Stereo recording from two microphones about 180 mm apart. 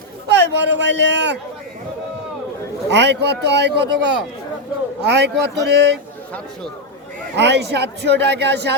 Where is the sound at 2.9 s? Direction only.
70° right (ahead or behind).